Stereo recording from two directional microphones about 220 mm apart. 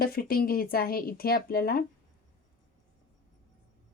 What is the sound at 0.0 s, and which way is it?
Speech, 45° left (ahead or behind).